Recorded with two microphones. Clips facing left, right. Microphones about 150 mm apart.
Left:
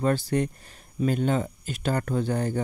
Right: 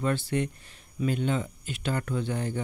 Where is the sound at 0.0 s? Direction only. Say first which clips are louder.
Left 4 dB; 40° left (ahead or behind).